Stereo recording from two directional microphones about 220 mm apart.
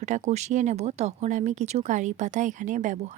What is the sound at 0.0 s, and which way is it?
Speech, 30° right (ahead or behind).